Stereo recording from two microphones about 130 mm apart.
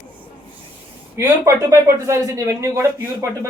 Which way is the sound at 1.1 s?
20° right (ahead or behind).